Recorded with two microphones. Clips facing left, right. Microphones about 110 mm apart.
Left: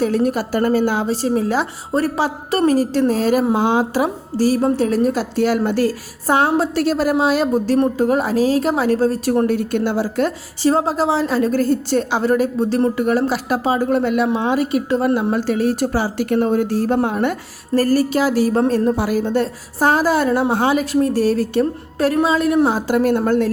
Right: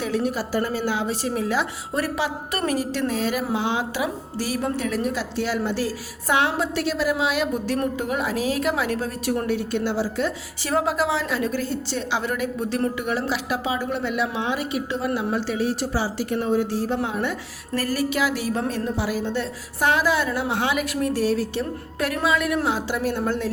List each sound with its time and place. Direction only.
0.0 s a woman's voice: 45° left (ahead or behind)
1.0 s a woman's voice: 35° left (ahead or behind); by 5.9 s 50° left (ahead or behind)
6.2 s a woman's voice: 40° left (ahead or behind)
10.6 s a woman's voice: 30° left (ahead or behind); by 17.3 s 50° left (ahead or behind)
17.7 s a woman's voice: 40° left (ahead or behind)
22.0 s a woman's voice: 30° left (ahead or behind); by 23.5 s 50° left (ahead or behind)